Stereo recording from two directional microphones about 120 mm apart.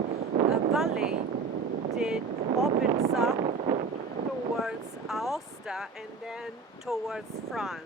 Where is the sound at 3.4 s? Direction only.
60° right (ahead or behind).